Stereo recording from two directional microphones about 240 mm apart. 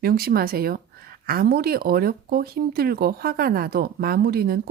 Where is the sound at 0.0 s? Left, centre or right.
Right.